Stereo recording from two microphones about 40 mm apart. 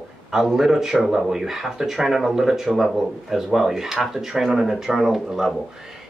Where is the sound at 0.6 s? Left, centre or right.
Centre.